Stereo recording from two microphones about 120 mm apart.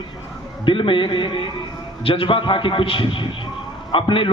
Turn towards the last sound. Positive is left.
turn(degrees=45)  # may be behind; listen again after turning